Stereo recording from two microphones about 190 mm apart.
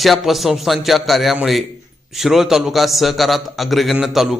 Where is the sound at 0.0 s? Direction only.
Centre (ahead or behind).